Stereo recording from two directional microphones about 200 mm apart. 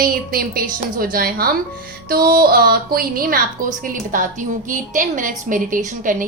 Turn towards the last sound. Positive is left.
turn(degrees=-40)  # may be behind; listen again after turning